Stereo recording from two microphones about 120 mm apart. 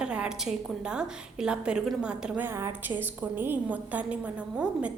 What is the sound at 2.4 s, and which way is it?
A woman's voice, 20° right (ahead or behind).